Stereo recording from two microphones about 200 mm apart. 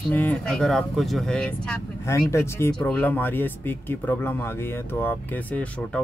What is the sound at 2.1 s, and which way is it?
Speech, 15° left (ahead or behind).